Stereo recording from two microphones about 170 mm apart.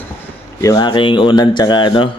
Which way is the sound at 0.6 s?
20° left (ahead or behind).